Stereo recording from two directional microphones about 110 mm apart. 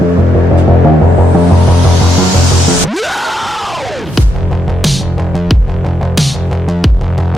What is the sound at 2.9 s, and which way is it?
Music, centre (ahead or behind).